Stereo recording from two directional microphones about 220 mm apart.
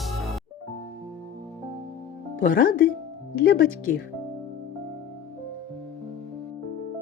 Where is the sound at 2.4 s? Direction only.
40° left (ahead or behind).